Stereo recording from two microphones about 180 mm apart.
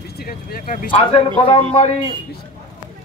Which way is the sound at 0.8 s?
30° left (ahead or behind).